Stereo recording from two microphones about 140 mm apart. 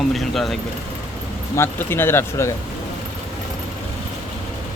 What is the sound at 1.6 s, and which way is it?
Speech, 15° left (ahead or behind).